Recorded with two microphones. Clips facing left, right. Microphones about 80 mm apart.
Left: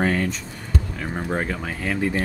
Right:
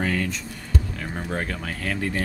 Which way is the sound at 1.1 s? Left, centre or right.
Left.